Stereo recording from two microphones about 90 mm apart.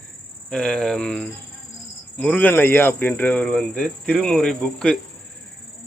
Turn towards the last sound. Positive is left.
turn(degrees=5)  # may be behind; listen again after turning